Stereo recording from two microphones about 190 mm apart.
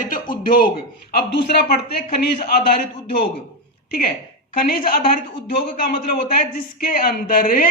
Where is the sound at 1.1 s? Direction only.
55° left (ahead or behind).